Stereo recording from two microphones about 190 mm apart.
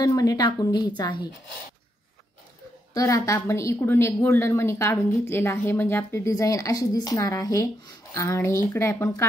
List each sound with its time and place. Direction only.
0.0 s speech: 20° left (ahead or behind)
2.9 s speech: 15° left (ahead or behind)